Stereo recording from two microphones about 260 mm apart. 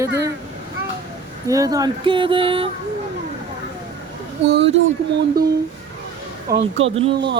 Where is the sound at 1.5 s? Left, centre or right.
Centre.